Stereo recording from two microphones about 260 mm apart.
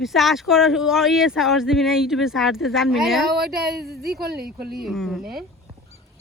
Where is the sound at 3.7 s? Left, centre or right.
Right.